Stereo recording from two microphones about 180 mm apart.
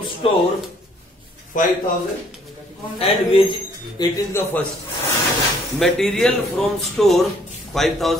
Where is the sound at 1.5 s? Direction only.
45° left (ahead or behind).